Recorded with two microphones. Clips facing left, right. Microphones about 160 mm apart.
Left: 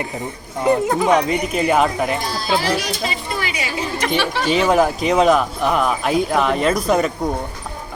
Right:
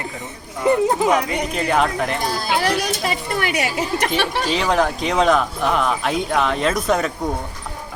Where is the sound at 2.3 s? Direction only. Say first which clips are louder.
Even; 60° right (ahead or behind).